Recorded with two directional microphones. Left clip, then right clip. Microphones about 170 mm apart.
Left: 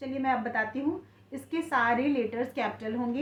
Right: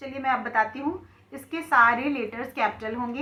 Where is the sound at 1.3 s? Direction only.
35° left (ahead or behind).